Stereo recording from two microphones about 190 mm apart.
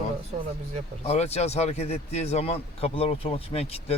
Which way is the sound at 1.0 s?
35° left (ahead or behind).